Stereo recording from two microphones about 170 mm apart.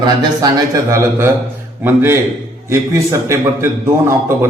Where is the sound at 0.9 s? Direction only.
15° right (ahead or behind).